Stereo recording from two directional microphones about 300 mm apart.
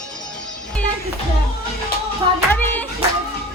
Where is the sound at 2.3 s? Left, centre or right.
Centre.